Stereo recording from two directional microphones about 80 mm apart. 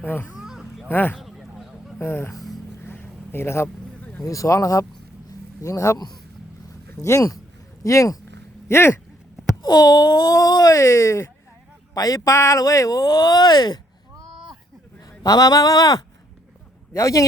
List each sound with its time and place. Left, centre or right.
0.0 s speech: left
0.3 s a sound: centre
0.9 s speech: left
1.1 s honk: centre
2.0 s speech: left
2.8 s a sound: left
4.2 s speech: left
7.0 s speech: left
8.6 s speech: left
9.6 s speech: left
11.9 s speech: left
15.2 s speech: left